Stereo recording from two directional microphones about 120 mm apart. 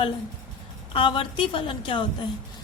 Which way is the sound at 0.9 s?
45° left (ahead or behind).